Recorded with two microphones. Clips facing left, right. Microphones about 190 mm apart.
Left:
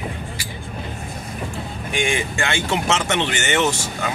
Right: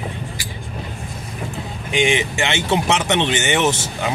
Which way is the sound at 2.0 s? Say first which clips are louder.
Right 4 dB; 20° right (ahead or behind).